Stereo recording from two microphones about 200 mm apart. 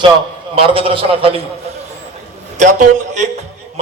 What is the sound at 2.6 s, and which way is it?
Speech, 40° right (ahead or behind).